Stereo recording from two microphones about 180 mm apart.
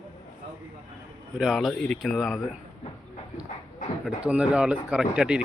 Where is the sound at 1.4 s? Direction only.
Centre (ahead or behind).